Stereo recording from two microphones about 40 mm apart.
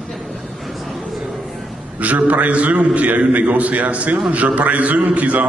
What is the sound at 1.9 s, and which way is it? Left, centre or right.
A man's voice, right.